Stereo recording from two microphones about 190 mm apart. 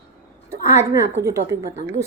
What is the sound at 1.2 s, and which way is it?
Speech, 60° right (ahead or behind).